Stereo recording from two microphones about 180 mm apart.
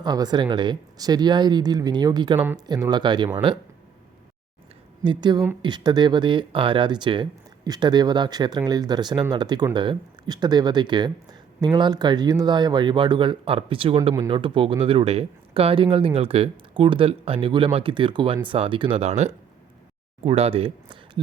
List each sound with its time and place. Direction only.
0.0 s speech: 25° right (ahead or behind)
5.0 s speech: 25° right (ahead or behind)